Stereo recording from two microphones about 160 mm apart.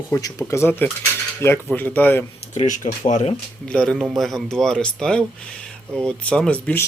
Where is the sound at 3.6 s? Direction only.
5° left (ahead or behind).